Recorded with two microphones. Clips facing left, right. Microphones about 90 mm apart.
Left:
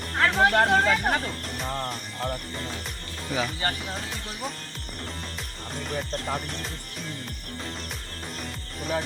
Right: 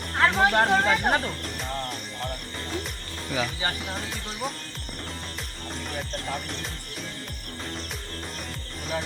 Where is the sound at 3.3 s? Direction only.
Centre (ahead or behind).